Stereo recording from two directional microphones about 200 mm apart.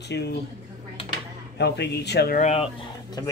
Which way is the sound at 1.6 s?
55° left (ahead or behind).